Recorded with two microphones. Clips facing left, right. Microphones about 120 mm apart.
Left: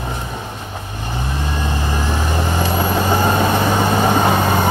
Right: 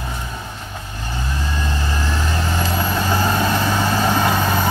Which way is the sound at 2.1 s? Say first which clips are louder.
Left 2 dB; 20° left (ahead or behind).